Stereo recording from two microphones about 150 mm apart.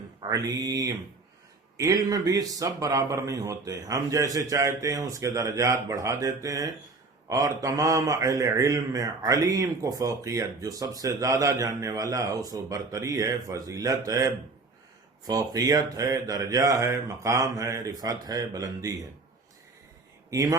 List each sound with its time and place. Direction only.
0.3 s speech: 25° right (ahead or behind)
20.3 s speech: 25° right (ahead or behind)